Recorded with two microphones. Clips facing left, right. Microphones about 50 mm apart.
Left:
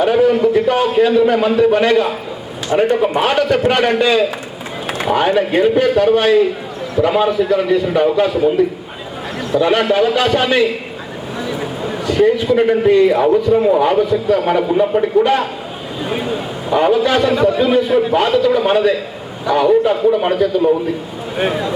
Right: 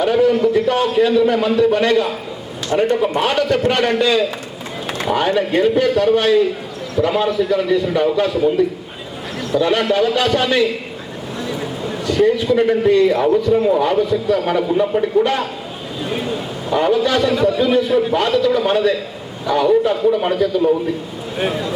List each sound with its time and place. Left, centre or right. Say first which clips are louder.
0.0 s a man's voice: left 2 dB; left
4.9 s a sound: left 3 dB; left
5.5 s a man's voice: left 2 dB; centre
16.0 s a sound: left 2 dB; centre
16.8 s a man's voice: left 2 dB; left
17.6 s a man's voice: left 2 dB; left